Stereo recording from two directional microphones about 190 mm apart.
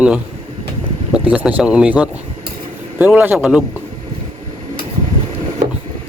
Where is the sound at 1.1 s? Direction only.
5° right (ahead or behind).